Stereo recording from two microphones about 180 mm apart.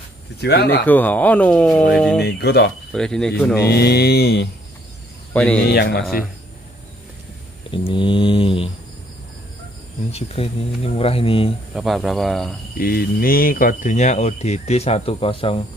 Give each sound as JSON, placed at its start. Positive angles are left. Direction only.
{"t": 0.4, "sound": "mantra", "side_deg": 65}
{"t": 0.8, "sound": "speech", "side_deg": 10}
{"t": 2.1, "sound": "mantra", "side_deg": 65}
{"t": 2.9, "sound": "speech", "side_deg": 5}
{"t": 3.5, "sound": "mantra", "side_deg": 65}
{"t": 5.3, "sound": "speech", "side_deg": 10}
{"t": 5.7, "sound": "mantra", "side_deg": 65}
{"t": 7.7, "sound": "mantra", "side_deg": 30}
{"t": 10.1, "sound": "speech", "side_deg": 35}
{"t": 11.7, "sound": "speech", "side_deg": 0}
{"t": 12.7, "sound": "speech", "side_deg": 55}